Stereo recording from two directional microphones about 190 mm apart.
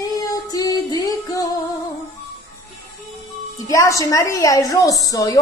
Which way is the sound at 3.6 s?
15° left (ahead or behind).